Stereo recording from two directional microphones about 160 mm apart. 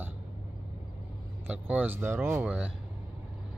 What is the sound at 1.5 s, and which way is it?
Speech, 10° right (ahead or behind).